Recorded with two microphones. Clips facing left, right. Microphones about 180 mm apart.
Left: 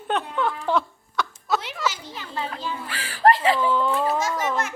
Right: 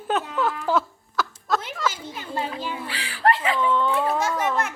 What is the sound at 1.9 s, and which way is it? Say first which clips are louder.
Children playing: right 3 dB; 50° right (ahead or behind).